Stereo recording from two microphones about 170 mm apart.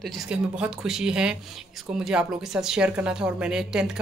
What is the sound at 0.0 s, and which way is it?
Speech, 5° right (ahead or behind).